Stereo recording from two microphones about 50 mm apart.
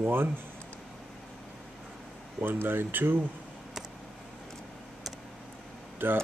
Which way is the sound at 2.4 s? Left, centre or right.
Right.